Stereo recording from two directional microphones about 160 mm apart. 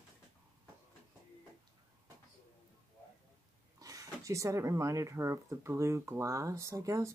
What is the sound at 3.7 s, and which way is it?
Speech, 20° right (ahead or behind).